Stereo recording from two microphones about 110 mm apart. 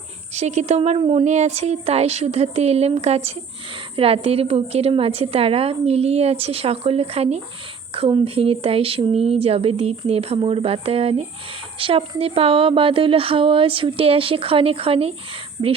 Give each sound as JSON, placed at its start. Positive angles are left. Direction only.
{"t": 0.3, "sound": "speech", "side_deg": -90}
{"t": 0.9, "sound": "a woman's voice", "side_deg": -65}
{"t": 8.2, "sound": "a woman's voice", "side_deg": -60}
{"t": 15.6, "sound": "a woman's voice", "side_deg": -50}